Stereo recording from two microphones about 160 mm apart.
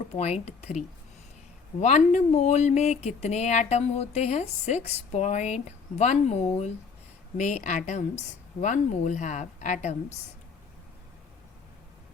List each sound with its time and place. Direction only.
0.1 s speech: 40° left (ahead or behind)